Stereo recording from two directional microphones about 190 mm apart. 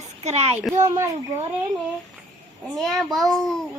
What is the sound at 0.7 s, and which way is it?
Speech, 15° right (ahead or behind).